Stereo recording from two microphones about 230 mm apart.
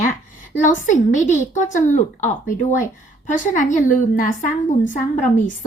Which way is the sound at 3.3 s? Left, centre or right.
Left.